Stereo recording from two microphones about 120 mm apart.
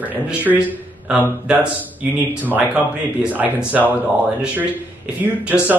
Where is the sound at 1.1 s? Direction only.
10° right (ahead or behind).